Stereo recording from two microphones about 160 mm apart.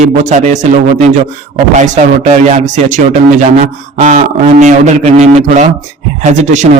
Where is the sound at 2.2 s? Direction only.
45° right (ahead or behind).